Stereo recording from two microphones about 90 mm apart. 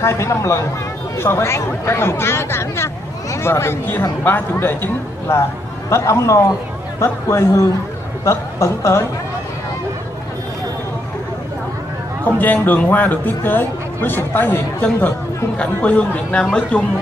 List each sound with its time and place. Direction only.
0.0 s a man's voice: 30° left (ahead or behind)
12.3 s a man's voice: 20° left (ahead or behind)